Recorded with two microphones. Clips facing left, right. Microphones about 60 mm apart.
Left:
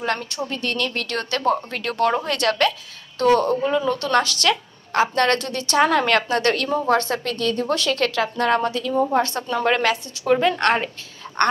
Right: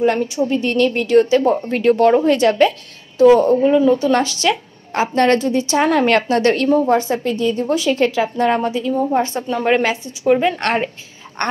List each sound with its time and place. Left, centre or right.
0.0 s a woman's voice: right
1.0 s a woman's voice: centre
1.7 s a woman's voice: right
6.9 s a woman's voice: centre
10.6 s a woman's voice: right